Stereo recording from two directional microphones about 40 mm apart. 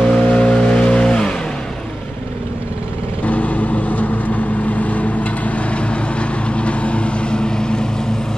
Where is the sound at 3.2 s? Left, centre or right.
Left.